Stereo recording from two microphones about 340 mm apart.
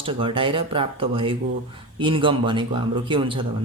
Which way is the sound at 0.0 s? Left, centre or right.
Centre.